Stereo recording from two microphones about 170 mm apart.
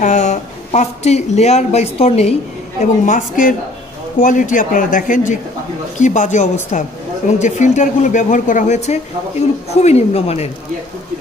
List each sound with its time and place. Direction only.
0.0 s speech: 45° left (ahead or behind)
2.8 s speech: 50° left (ahead or behind)